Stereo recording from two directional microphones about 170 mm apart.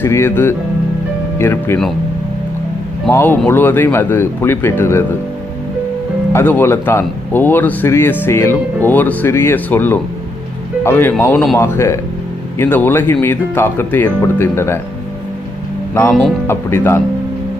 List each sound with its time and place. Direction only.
0.0 s speech: 15° left (ahead or behind)
3.1 s speech: 10° left (ahead or behind)
6.3 s speech: 10° left (ahead or behind)
15.9 s speech: 15° left (ahead or behind)